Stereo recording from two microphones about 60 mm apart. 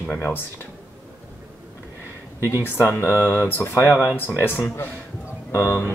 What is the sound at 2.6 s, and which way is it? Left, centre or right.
Speech, left.